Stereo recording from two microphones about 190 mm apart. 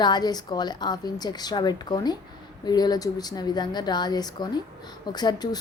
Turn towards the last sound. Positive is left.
turn(degrees=20)  # may be behind; listen again after turning